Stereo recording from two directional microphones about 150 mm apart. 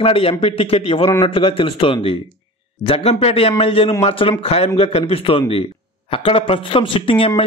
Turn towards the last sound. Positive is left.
turn(degrees=35)  # may be behind; listen again after turning